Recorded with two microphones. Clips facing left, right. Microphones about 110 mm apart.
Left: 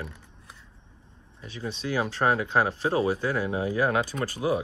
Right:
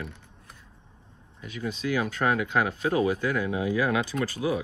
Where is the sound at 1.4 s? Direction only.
30° left (ahead or behind).